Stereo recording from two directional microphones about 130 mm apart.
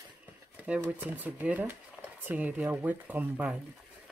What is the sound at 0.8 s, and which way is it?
Speech, 15° right (ahead or behind).